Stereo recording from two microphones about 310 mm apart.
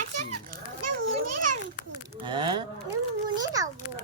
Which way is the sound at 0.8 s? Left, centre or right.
Right.